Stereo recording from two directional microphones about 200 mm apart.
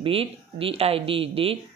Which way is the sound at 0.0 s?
30° right (ahead or behind).